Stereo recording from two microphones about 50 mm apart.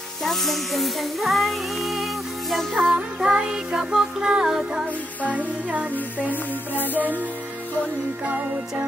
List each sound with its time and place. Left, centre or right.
0.2 s music: centre
2.9 s music: centre
5.2 s music: right
7.0 s music: right